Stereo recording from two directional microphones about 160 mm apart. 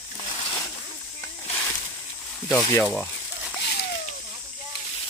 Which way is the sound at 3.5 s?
90° left.